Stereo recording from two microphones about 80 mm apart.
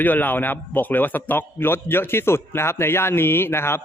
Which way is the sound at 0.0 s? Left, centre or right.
Left.